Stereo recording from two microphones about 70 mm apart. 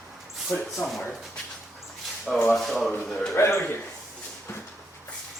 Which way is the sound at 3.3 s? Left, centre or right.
Left.